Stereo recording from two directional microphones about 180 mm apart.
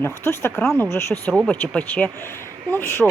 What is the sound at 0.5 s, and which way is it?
Speech, 5° left (ahead or behind).